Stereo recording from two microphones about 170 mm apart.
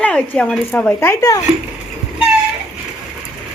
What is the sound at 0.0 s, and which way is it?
Speech, 5° left (ahead or behind).